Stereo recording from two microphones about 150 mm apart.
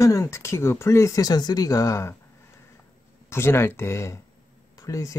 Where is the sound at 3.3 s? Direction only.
15° left (ahead or behind).